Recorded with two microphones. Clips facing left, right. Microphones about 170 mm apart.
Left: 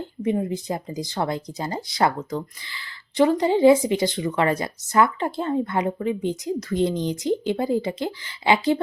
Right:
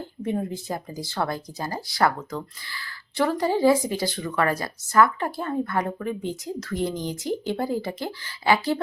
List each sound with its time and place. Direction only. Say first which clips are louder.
0.0 s speech: left 4 dB; 15° left (ahead or behind)